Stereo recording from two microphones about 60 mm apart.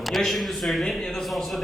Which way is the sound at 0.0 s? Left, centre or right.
Centre.